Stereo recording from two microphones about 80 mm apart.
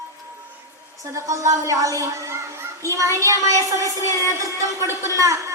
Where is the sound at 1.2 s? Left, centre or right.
Right.